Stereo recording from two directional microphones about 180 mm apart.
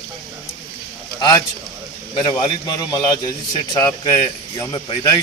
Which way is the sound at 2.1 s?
25° left (ahead or behind).